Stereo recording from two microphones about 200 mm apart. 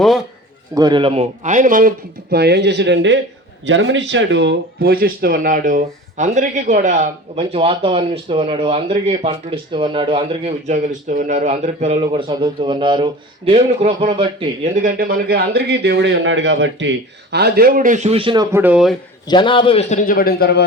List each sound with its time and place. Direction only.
0.7 s speech: 20° right (ahead or behind); by 1.9 s 40° right (ahead or behind)
2.3 s speech: 55° right (ahead or behind)
17.3 s speech: 50° right (ahead or behind); by 18.4 s 25° right (ahead or behind)
18.5 s speech: 10° right (ahead or behind)
19.3 s a man's voice: 25° left (ahead or behind); by 20.7 s 50° left (ahead or behind)